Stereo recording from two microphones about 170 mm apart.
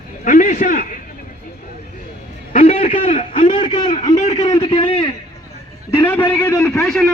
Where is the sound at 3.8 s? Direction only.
45° left (ahead or behind).